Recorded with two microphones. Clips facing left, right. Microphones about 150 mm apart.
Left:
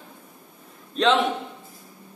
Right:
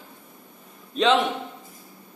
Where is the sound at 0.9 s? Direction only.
Centre (ahead or behind).